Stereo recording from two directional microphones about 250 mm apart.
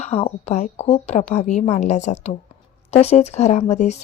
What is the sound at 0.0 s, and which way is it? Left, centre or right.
Speech, left.